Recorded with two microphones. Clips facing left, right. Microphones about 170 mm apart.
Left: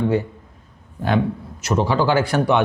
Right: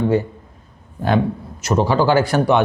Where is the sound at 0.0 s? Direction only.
40° right (ahead or behind).